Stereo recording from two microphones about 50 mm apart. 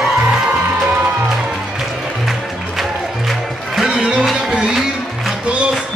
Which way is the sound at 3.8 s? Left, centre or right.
Centre.